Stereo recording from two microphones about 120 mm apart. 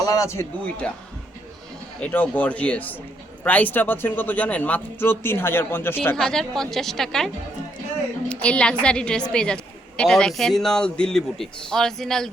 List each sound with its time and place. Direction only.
0.0 s speech: 30° left (ahead or behind)
2.0 s speech: 15° left (ahead or behind)
6.1 s speech: centre (ahead or behind)
8.3 s speech: 10° left (ahead or behind)